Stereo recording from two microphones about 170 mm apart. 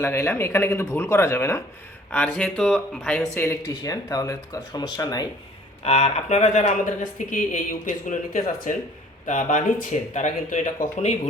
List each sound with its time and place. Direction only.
0.0 s speech: 15° left (ahead or behind)
3.3 s speech: 15° left (ahead or behind)
5.8 s speech: 40° left (ahead or behind)